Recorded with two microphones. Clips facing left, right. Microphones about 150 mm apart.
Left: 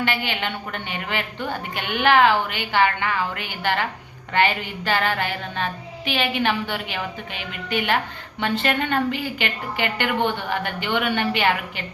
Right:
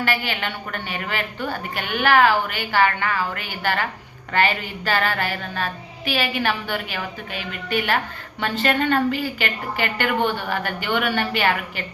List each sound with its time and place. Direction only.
0.0 s a woman's voice: 20° left (ahead or behind)